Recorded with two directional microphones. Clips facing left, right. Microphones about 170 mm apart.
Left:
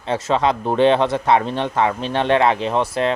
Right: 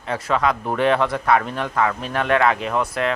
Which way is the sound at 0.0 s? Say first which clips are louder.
Left 3 dB; 25° left (ahead or behind).